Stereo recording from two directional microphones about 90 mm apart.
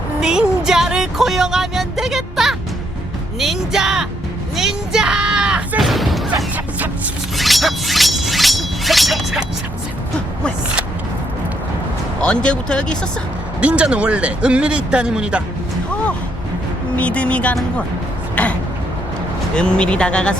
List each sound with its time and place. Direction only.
0.2 s music: 10° right (ahead or behind)
3.3 s speech: 5° right (ahead or behind)
4.5 s a sound: 5° right (ahead or behind)
5.8 s a sound: centre (ahead or behind)
7.3 s music: centre (ahead or behind)
12.2 s speech: 10° left (ahead or behind)
13.6 s speech: 15° right (ahead or behind)
17.0 s speech: 15° left (ahead or behind)
18.4 s a sound: 15° left (ahead or behind)
19.5 s speech: 10° left (ahead or behind)